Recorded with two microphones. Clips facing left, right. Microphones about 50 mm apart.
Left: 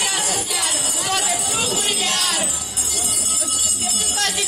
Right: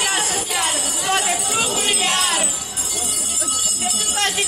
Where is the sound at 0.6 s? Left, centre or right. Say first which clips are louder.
Right 2 dB; right.